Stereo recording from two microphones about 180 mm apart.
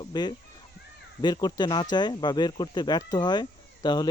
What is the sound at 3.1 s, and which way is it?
Speech, 25° left (ahead or behind).